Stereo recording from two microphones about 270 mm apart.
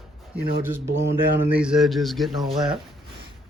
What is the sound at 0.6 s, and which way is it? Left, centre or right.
A man's voice, centre.